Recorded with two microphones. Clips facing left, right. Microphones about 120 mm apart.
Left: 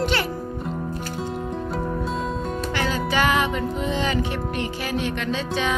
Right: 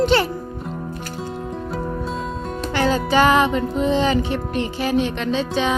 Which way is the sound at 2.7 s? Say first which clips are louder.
Right 7 dB; 35° right (ahead or behind).